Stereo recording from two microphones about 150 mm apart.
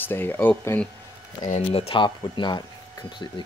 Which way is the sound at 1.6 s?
40° left (ahead or behind).